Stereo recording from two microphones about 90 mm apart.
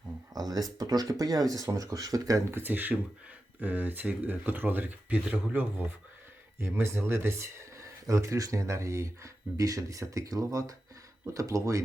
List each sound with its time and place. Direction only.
0.3 s speech: 45° right (ahead or behind); by 5.8 s 15° right (ahead or behind)
6.6 s speech: 30° right (ahead or behind)